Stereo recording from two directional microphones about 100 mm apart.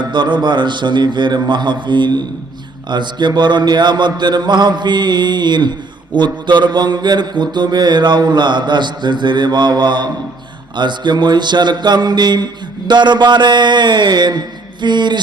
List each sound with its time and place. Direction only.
0.0 s mantra: 50° right (ahead or behind)